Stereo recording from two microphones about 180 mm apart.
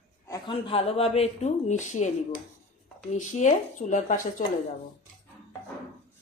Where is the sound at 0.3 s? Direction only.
25° left (ahead or behind); by 2.0 s 45° left (ahead or behind).